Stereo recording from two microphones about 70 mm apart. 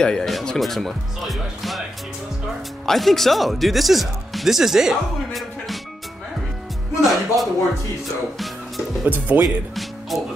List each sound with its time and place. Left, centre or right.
0.0 s speech: centre
2.9 s speech: centre
7.0 s music: centre
9.0 s speech: right
9.4 s speech: centre